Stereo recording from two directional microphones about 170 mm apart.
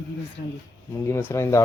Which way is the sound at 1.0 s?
15° left (ahead or behind).